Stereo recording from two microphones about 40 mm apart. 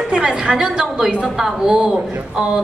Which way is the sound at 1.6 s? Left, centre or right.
Right.